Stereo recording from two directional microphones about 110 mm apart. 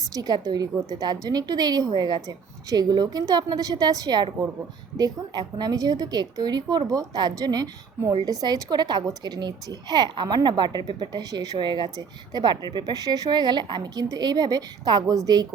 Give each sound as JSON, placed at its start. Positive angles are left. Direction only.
{"t": 0.1, "sound": "a woman's voice", "side_deg": -35}